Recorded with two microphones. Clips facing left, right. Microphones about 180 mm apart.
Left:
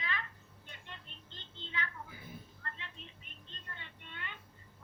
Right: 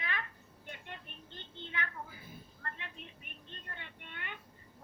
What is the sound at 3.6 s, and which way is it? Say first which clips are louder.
Vehicle: right 1 dB; 55° right (ahead or behind).